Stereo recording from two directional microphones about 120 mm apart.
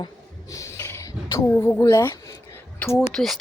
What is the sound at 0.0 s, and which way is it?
Speech, 30° left (ahead or behind).